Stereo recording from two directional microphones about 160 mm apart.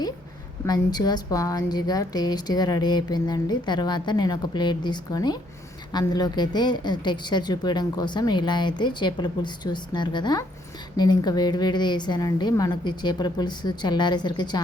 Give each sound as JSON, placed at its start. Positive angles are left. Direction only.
{"t": 0.6, "sound": "a woman's voice", "side_deg": 25}